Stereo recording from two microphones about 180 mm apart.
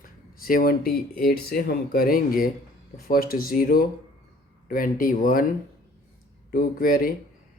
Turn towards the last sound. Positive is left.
turn(degrees=50)  # may be behind; listen again after turning